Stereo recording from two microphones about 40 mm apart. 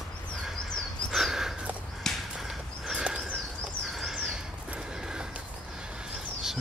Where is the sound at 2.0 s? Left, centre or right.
Centre.